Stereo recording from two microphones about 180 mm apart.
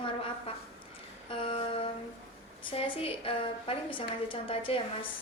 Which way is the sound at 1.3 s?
30° left (ahead or behind).